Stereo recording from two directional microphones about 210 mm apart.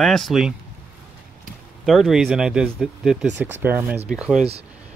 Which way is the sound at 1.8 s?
Centre (ahead or behind).